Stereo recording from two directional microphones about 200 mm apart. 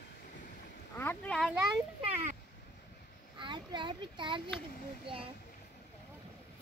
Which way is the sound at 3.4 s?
25° right (ahead or behind).